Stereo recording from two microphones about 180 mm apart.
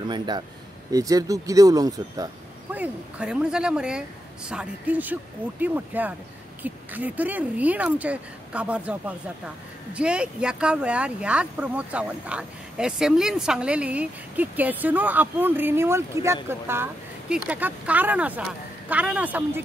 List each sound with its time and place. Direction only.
0.9 s speech: 20° right (ahead or behind)
2.7 s speech: 5° right (ahead or behind)